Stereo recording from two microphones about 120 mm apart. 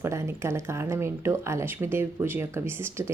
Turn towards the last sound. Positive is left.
turn(degrees=-20)  # may be behind; listen again after turning